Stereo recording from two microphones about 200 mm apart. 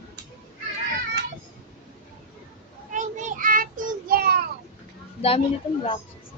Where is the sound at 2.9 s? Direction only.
40° right (ahead or behind).